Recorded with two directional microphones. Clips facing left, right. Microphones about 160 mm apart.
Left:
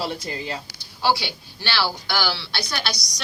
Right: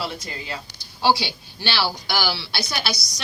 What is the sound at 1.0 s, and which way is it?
A woman's voice, 20° right (ahead or behind).